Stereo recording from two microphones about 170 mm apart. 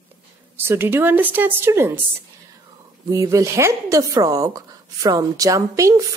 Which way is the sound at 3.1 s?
20° right (ahead or behind).